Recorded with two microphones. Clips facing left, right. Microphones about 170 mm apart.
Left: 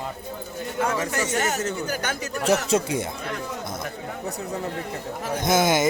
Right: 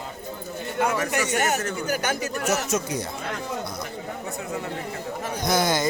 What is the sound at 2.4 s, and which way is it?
Speech, 30° left (ahead or behind).